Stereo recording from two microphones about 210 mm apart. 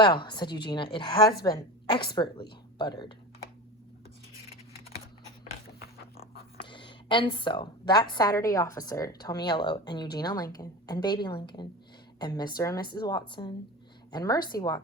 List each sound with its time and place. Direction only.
0.0 s a woman's voice: 20° left (ahead or behind)
6.7 s a woman's voice: 25° left (ahead or behind)